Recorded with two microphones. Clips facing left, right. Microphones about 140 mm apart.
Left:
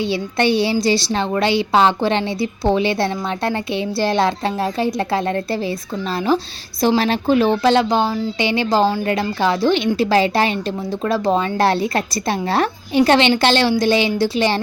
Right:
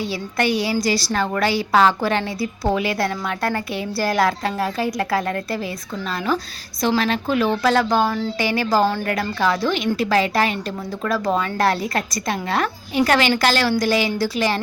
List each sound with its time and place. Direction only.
0.0 s a woman's voice: 25° left (ahead or behind)